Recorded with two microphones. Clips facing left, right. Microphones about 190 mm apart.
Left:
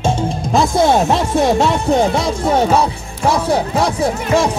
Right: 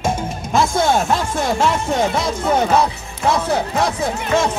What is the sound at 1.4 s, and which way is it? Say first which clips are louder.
Speech: left 2 dB; 40° left (ahead or behind).